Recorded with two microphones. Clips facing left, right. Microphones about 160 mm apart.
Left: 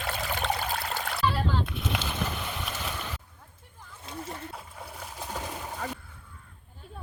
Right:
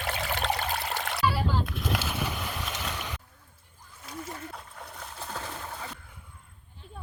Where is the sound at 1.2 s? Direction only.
5° right (ahead or behind).